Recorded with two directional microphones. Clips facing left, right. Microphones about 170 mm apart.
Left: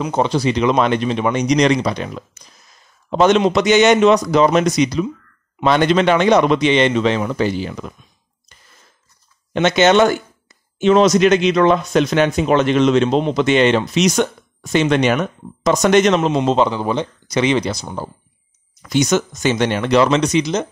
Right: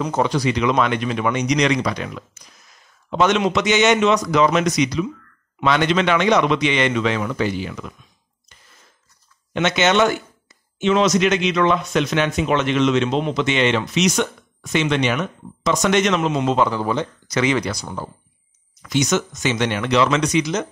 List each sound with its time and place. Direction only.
0.0 s speech: 20° left (ahead or behind)
9.5 s speech: 35° left (ahead or behind)